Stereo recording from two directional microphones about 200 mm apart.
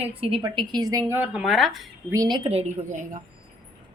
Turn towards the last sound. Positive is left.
turn(degrees=-40)  # may be behind; listen again after turning